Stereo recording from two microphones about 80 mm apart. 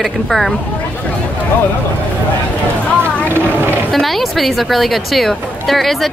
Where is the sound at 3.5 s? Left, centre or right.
Right.